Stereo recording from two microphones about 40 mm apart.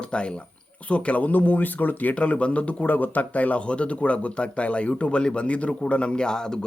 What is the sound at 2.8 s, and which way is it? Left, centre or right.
Speech, left.